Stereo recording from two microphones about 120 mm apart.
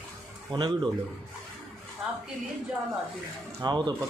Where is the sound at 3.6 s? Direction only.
35° right (ahead or behind).